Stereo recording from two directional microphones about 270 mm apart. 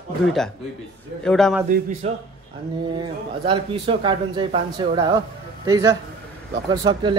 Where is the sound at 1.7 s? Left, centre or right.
Right.